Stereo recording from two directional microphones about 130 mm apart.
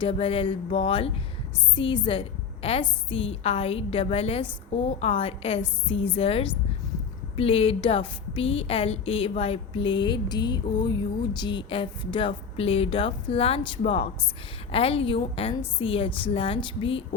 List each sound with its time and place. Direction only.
0.0 s a woman's voice: 45° left (ahead or behind)